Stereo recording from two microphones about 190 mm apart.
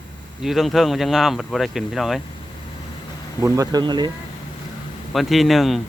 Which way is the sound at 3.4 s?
20° right (ahead or behind).